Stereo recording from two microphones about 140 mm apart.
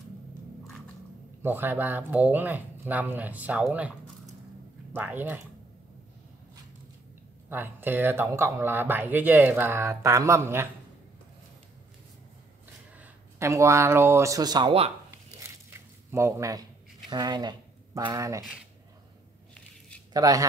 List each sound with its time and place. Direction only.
1.4 s speech: 15° right (ahead or behind)
4.9 s speech: 15° right (ahead or behind)
7.4 s speech: 15° right (ahead or behind)
13.0 s speech: 20° right (ahead or behind)
16.1 s speech: 20° right (ahead or behind)
20.1 s speech: 25° right (ahead or behind)